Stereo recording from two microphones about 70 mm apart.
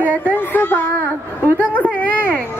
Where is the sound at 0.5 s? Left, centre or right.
Left.